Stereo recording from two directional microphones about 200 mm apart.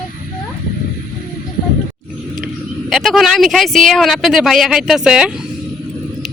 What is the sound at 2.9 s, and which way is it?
Speech, centre (ahead or behind).